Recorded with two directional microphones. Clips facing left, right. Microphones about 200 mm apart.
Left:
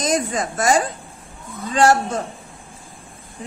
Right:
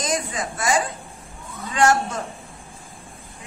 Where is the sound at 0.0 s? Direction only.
45° left (ahead or behind).